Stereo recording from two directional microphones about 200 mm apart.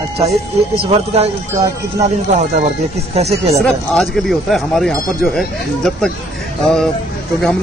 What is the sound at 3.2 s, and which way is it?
Speech, 30° right (ahead or behind).